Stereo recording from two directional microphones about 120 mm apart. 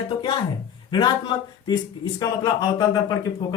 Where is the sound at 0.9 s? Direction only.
40° left (ahead or behind).